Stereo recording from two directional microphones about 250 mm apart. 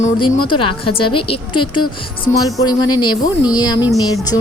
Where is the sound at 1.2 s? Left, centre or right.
Left.